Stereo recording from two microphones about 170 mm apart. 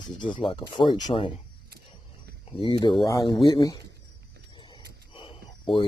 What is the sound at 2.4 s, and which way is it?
Speech, 30° left (ahead or behind).